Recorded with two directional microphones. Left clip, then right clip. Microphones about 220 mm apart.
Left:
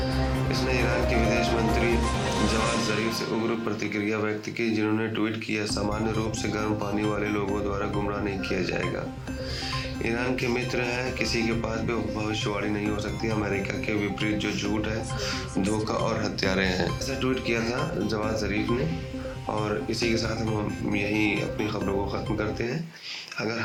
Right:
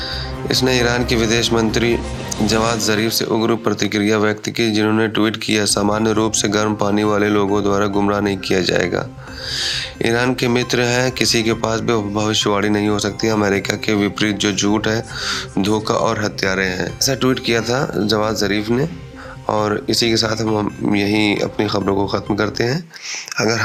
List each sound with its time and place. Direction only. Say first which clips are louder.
0.5 s speech: right 12 dB; 45° right (ahead or behind)
3.1 s speech: right 10 dB; 45° right (ahead or behind); by 16.8 s 25° right (ahead or behind)
17.1 s speech: right 13 dB; 45° right (ahead or behind)